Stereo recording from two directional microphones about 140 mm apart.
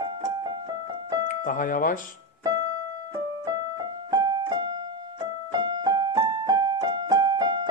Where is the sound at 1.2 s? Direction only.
70° left (ahead or behind).